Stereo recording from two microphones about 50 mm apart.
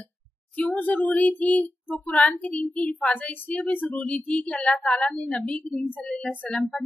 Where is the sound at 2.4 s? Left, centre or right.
Left.